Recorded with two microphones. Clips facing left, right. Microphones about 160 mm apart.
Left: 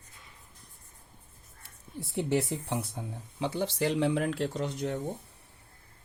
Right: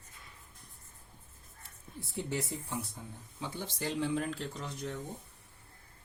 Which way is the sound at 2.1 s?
70° left (ahead or behind).